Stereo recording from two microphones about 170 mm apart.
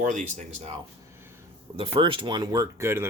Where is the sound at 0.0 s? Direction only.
45° right (ahead or behind).